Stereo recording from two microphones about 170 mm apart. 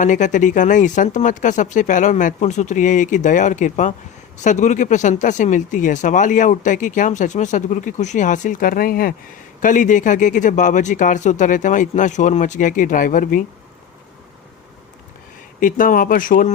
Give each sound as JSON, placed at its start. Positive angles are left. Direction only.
{"t": 0.0, "sound": "speech", "side_deg": 50}
{"t": 15.6, "sound": "speech", "side_deg": 55}